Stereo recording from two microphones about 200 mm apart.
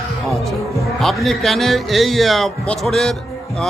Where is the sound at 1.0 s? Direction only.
Centre (ahead or behind).